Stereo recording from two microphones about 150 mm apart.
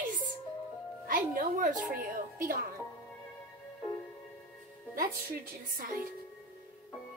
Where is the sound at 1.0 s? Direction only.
70° right (ahead or behind).